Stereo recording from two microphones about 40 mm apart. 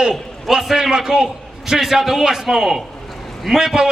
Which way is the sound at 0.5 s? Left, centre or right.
Centre.